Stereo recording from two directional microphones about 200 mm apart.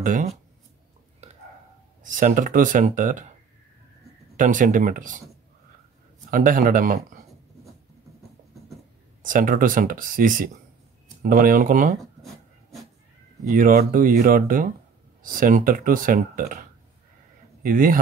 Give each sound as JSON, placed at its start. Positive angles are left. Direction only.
{"t": 0.0, "sound": "speech", "side_deg": -40}
{"t": 1.2, "sound": "a sound", "side_deg": -35}
{"t": 2.0, "sound": "speech", "side_deg": -40}
{"t": 4.4, "sound": "speech", "side_deg": -40}
{"t": 6.3, "sound": "speech", "side_deg": -45}
{"t": 9.2, "sound": "speech", "side_deg": -40}
{"t": 12.0, "sound": "a sound", "side_deg": 0}
{"t": 13.5, "sound": "speech", "side_deg": -40}
{"t": 17.6, "sound": "speech", "side_deg": -45}